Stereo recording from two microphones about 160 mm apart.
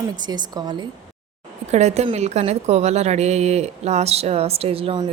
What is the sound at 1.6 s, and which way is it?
A woman's voice, 45° right (ahead or behind).